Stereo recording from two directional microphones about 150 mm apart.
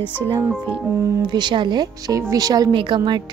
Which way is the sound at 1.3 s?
30° right (ahead or behind).